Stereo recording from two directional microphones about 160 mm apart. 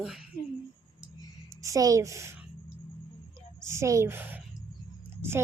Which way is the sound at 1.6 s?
20° right (ahead or behind).